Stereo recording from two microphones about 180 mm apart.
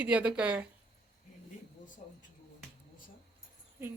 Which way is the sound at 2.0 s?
40° left (ahead or behind).